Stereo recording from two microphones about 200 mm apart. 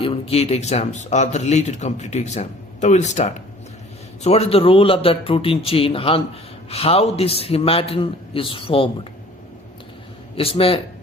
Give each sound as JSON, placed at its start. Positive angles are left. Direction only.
{"t": 0.0, "sound": "a man's voice", "side_deg": 30}
{"t": 10.3, "sound": "a man's voice", "side_deg": 30}